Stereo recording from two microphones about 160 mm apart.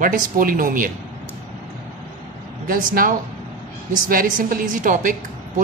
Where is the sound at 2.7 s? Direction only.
60° right (ahead or behind).